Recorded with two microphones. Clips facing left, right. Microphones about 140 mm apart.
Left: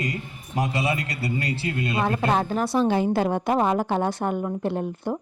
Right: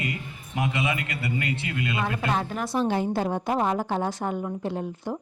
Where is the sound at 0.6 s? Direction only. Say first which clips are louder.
Left 2 dB; 35° left (ahead or behind).